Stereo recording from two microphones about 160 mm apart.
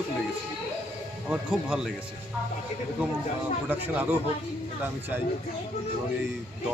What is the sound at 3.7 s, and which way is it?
Speech, 10° right (ahead or behind).